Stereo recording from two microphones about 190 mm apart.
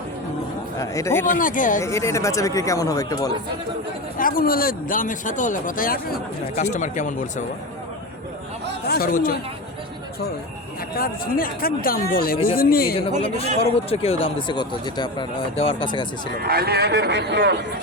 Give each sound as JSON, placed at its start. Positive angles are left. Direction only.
{"t": 0.8, "sound": "speech", "side_deg": 15}
{"t": 1.4, "sound": "speech", "side_deg": 45}
{"t": 1.8, "sound": "speech", "side_deg": 15}
{"t": 4.2, "sound": "speech", "side_deg": 50}
{"t": 8.9, "sound": "speech", "side_deg": 50}
{"t": 10.9, "sound": "speech", "side_deg": 50}
{"t": 13.0, "sound": "speech", "side_deg": 30}
{"t": 16.4, "sound": "speech", "side_deg": -55}